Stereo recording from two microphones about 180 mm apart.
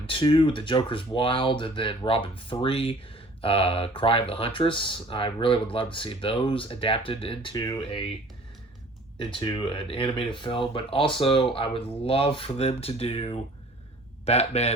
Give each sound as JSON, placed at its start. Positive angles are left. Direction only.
{"t": 0.0, "sound": "speech", "side_deg": 30}
{"t": 9.1, "sound": "speech", "side_deg": 30}